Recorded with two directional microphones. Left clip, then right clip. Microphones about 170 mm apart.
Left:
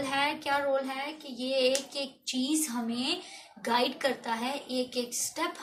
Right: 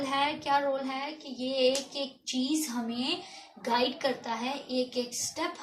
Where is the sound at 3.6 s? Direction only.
15° left (ahead or behind).